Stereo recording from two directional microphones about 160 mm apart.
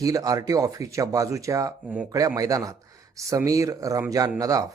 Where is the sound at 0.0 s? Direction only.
20° right (ahead or behind).